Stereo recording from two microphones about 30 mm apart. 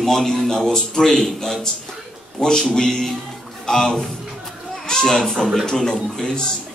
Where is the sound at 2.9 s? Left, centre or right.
Centre.